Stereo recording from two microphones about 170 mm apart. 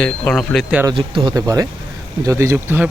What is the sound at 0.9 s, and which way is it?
Speech, 30° right (ahead or behind).